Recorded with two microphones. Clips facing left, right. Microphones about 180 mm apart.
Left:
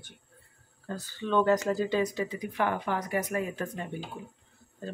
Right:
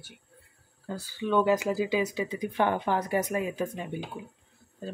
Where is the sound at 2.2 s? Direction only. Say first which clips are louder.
Right 3 dB; 25° right (ahead or behind).